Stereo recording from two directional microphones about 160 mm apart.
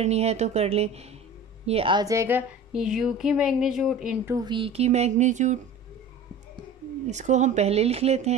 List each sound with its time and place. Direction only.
0.0 s a woman's voice: 40° right (ahead or behind); by 4.2 s 5° right (ahead or behind)
4.3 s speech: 25° right (ahead or behind); by 5.6 s 50° right (ahead or behind)
7.1 s speech: 45° right (ahead or behind)